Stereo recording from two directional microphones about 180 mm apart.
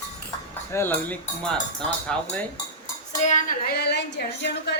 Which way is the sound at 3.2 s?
45° left (ahead or behind).